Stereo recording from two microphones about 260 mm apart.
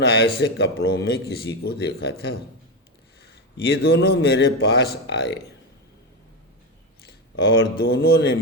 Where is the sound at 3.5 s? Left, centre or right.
Left.